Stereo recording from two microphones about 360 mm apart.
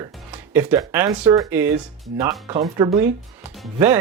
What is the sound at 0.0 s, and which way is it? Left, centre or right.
Speech, centre.